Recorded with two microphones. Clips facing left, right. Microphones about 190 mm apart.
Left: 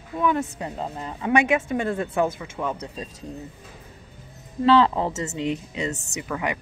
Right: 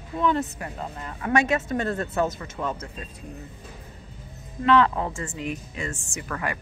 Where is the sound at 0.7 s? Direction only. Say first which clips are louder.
Left 4 dB; 25° left (ahead or behind).